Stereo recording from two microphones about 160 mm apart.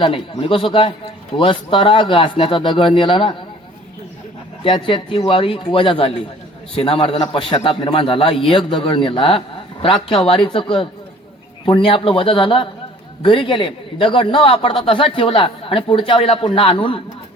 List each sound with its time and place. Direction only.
0.0 s a man's voice: 35° left (ahead or behind)
4.6 s a man's voice: 30° left (ahead or behind)